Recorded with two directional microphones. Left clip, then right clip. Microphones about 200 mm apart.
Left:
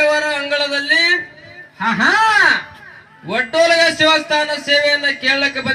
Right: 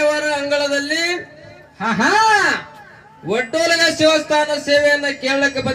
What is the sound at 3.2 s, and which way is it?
Speech, 55° right (ahead or behind).